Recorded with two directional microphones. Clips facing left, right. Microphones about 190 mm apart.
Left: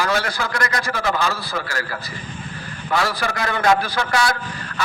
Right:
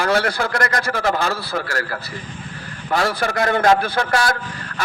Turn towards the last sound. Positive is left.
turn(degrees=-45)  # may be behind; listen again after turning